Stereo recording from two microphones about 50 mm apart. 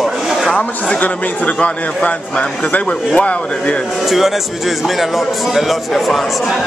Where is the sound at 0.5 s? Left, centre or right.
Left.